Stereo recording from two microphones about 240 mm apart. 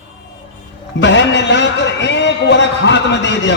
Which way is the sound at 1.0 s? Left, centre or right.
Left.